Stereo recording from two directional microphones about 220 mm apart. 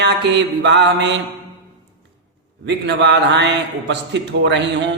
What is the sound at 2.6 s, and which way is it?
A man's voice, 50° right (ahead or behind).